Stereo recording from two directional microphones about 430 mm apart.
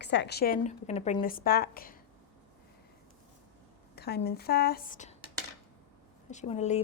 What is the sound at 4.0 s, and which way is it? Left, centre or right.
A woman's voice, left.